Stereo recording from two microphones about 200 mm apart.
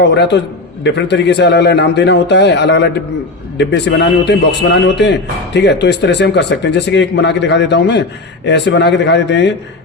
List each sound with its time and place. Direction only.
0.0 s speech: 60° left (ahead or behind)